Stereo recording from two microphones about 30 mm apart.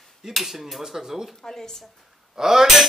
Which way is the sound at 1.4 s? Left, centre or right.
Centre.